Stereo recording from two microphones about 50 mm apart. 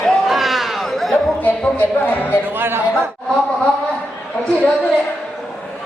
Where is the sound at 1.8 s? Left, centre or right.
Left.